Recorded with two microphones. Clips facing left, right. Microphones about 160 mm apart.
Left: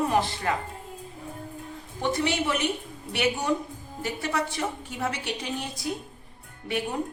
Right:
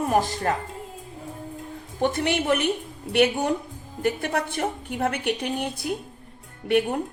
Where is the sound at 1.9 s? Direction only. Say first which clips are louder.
Right 3 dB; 55° right (ahead or behind).